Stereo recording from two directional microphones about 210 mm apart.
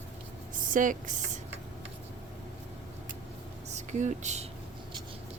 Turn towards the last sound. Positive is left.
turn(degrees=-35)  # may be behind; listen again after turning